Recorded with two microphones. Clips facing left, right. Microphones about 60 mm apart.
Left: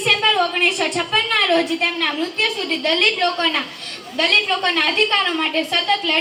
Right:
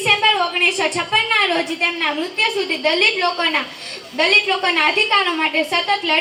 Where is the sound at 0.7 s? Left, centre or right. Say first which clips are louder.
Right 1 dB; right.